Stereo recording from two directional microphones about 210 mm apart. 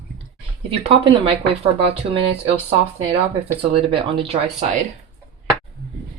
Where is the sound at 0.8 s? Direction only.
25° right (ahead or behind).